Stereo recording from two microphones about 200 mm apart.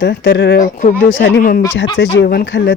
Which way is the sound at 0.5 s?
45° left (ahead or behind).